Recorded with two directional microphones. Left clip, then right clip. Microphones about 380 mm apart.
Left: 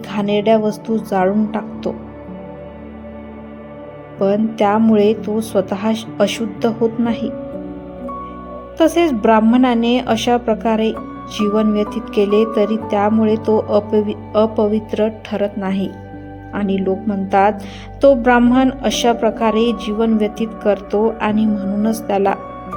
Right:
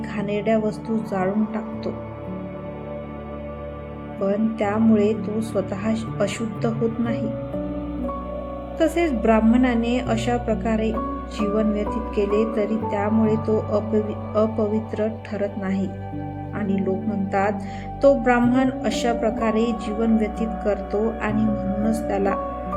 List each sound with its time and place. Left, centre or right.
0.1 s a woman's voice: centre
4.2 s a woman's voice: centre
8.8 s a woman's voice: centre